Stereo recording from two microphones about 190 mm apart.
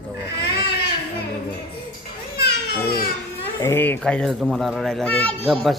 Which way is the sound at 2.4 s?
55° left (ahead or behind).